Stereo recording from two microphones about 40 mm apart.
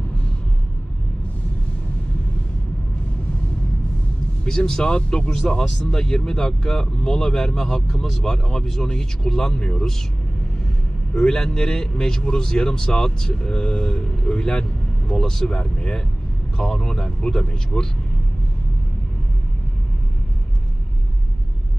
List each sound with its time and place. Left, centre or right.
4.5 s a man's voice: centre
11.1 s a man's voice: centre